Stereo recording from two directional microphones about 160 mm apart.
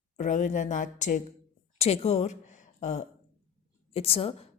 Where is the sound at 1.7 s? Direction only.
40° left (ahead or behind).